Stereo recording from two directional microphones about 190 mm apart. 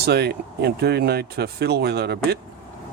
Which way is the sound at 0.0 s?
60° right (ahead or behind).